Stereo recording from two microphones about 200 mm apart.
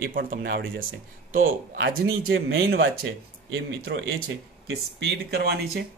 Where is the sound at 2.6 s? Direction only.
50° right (ahead or behind).